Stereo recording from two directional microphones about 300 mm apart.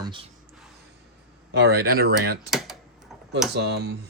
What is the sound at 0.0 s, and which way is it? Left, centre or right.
Speech, centre.